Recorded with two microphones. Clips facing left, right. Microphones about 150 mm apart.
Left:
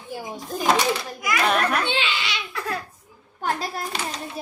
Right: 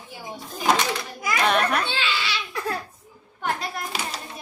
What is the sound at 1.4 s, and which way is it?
Speech, centre (ahead or behind).